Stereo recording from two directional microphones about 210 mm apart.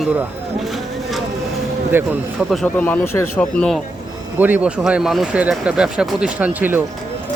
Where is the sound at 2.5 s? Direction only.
5° left (ahead or behind).